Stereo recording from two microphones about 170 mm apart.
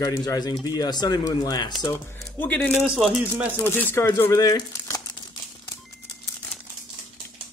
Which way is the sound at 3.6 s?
10° left (ahead or behind).